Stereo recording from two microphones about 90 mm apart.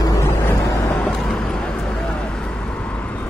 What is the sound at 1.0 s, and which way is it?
Vehicle, 10° left (ahead or behind).